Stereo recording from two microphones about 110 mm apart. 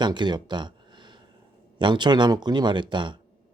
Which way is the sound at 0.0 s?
45° right (ahead or behind).